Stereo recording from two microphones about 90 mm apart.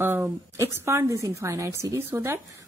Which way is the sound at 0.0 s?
25° right (ahead or behind).